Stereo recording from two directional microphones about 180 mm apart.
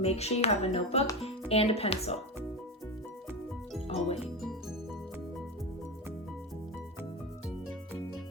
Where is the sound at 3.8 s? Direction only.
35° left (ahead or behind).